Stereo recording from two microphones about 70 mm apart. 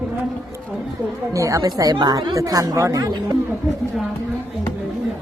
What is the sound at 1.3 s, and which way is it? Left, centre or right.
Speech, right.